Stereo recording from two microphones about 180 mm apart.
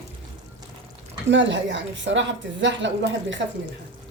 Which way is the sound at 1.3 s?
90° right.